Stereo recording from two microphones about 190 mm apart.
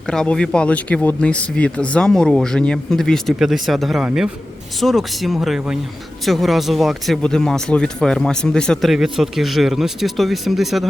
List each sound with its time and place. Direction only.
0.1 s speech: 5° left (ahead or behind)